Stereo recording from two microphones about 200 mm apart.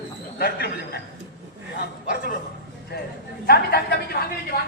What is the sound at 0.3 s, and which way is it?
Speech, 50° left (ahead or behind).